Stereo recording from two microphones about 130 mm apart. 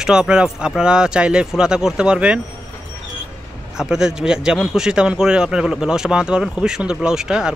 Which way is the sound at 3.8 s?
5° right (ahead or behind).